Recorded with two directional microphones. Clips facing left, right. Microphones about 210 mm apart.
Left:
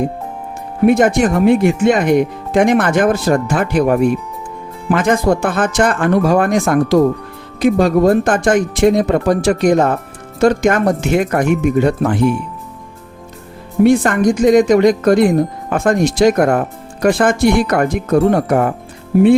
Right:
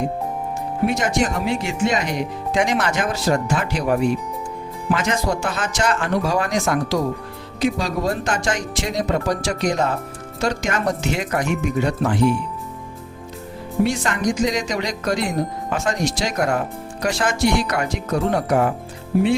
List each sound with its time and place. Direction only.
0.9 s speech: 55° left (ahead or behind)
13.8 s speech: 55° left (ahead or behind)